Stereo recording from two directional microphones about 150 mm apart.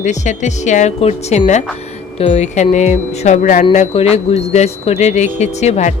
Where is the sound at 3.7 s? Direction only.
45° left (ahead or behind).